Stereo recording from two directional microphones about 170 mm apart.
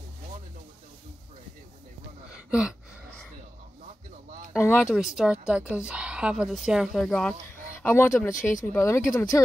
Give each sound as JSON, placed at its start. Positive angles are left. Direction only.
{"t": 4.6, "sound": "speech", "side_deg": 15}
{"t": 4.9, "sound": "speech", "side_deg": -5}
{"t": 7.8, "sound": "speech", "side_deg": 10}